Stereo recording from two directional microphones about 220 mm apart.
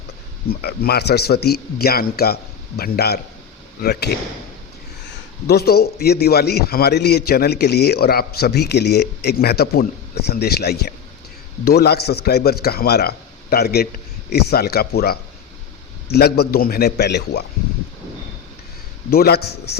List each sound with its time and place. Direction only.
0.4 s a man's voice: 45° left (ahead or behind)
5.5 s a man's voice: 45° left (ahead or behind)
19.1 s a man's voice: 45° left (ahead or behind)